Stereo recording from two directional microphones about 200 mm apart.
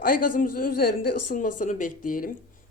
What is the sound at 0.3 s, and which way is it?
Speech, 45° left (ahead or behind).